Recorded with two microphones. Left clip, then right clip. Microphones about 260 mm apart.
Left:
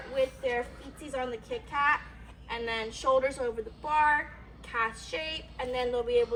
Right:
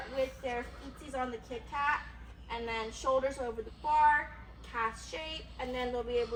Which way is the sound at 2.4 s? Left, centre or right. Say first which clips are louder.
Left 4 dB; centre.